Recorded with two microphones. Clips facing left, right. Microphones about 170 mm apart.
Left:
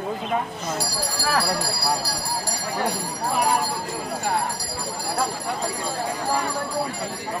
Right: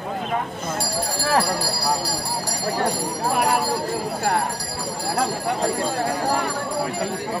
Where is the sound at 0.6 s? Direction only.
50° right (ahead or behind).